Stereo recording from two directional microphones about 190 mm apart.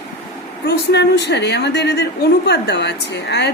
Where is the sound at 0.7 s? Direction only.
65° left (ahead or behind).